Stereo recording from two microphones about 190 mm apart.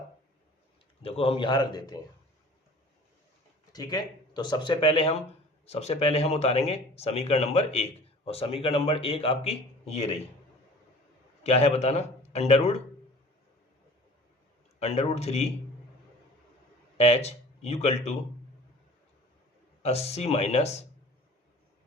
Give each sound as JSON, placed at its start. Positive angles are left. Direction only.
{"t": 1.0, "sound": "speech", "side_deg": 30}
{"t": 3.7, "sound": "speech", "side_deg": 20}
{"t": 11.4, "sound": "speech", "side_deg": 35}
{"t": 14.8, "sound": "speech", "side_deg": 35}
{"t": 17.0, "sound": "speech", "side_deg": 30}
{"t": 19.8, "sound": "speech", "side_deg": 30}